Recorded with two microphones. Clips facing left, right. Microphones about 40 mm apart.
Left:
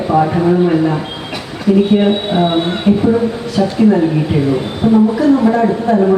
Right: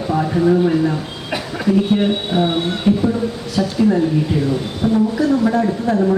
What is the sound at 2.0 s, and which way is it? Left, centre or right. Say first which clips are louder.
Speech: left 4 dB; left.